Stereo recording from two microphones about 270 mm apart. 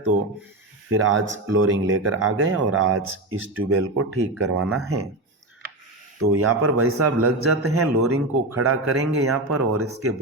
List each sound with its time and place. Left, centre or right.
0.9 s speech: right
6.3 s speech: right